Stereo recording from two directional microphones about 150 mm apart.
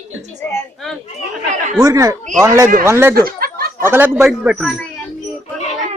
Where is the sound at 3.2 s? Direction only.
80° right.